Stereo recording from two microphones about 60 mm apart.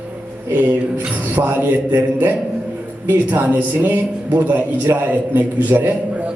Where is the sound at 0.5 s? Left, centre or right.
Right.